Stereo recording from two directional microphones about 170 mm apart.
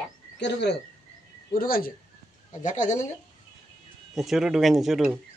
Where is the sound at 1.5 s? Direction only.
60° left (ahead or behind).